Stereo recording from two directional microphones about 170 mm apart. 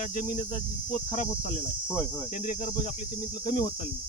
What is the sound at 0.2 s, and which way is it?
Speech, 45° left (ahead or behind).